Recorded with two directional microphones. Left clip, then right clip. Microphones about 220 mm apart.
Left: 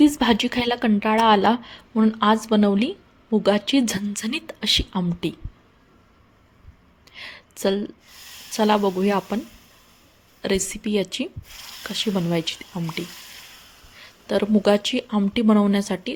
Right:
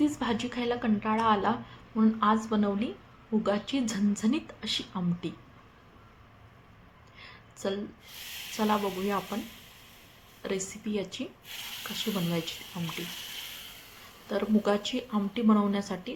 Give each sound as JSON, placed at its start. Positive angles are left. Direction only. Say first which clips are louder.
{"t": 0.0, "sound": "speech", "louder": "left 11 dB", "side_deg": 45}
{"t": 7.2, "sound": "a sound", "louder": "left 11 dB", "side_deg": 45}
{"t": 8.5, "sound": "a woman's voice", "louder": "left 9 dB", "side_deg": 40}
{"t": 10.4, "sound": "a woman's voice", "louder": "left 10 dB", "side_deg": 40}
{"t": 14.3, "sound": "a woman's voice", "louder": "left 9 dB", "side_deg": 40}